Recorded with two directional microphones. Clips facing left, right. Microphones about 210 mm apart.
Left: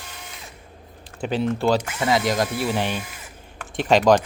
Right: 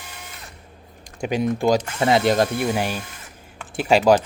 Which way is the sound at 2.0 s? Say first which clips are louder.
Right 3 dB; 25° right (ahead or behind).